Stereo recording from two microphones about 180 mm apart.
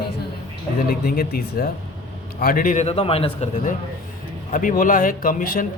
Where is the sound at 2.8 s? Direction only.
30° left (ahead or behind).